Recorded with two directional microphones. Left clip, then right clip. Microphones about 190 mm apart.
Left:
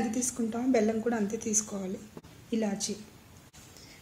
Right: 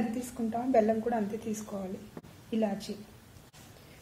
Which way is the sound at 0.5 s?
45° left (ahead or behind).